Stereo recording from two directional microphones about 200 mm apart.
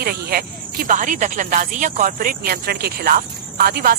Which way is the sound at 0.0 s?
50° right (ahead or behind).